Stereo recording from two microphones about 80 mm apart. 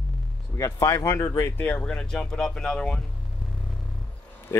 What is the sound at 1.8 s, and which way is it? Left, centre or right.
Speech, centre.